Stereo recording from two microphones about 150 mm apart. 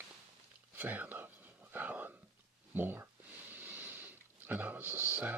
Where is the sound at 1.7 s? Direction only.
10° right (ahead or behind).